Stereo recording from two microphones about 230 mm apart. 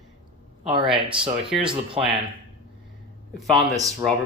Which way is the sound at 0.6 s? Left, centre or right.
Right.